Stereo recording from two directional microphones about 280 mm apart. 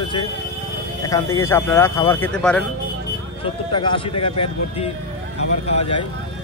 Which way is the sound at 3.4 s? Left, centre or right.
Centre.